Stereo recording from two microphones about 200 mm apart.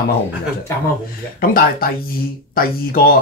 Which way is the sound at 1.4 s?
45° left (ahead or behind).